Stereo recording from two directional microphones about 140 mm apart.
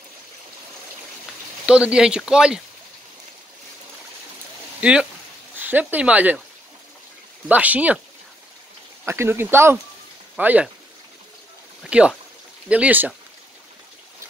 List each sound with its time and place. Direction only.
1.7 s speech: 5° right (ahead or behind)
4.7 s speech: 10° right (ahead or behind)
7.4 s speech: 10° right (ahead or behind)
9.0 s speech: 20° right (ahead or behind)
11.8 s speech: 5° right (ahead or behind)